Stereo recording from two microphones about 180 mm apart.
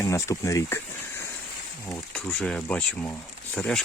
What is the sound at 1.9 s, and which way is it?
Speech, 5° left (ahead or behind).